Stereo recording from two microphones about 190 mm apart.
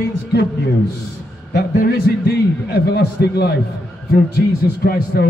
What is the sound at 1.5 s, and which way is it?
A man's voice, 55° left (ahead or behind).